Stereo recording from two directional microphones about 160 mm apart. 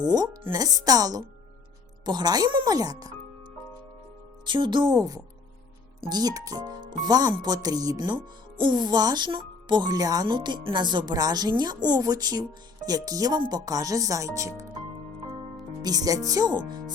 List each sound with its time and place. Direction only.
0.0 s speech: 25° right (ahead or behind)
4.4 s speech: 30° right (ahead or behind)
15.8 s speech: 25° right (ahead or behind)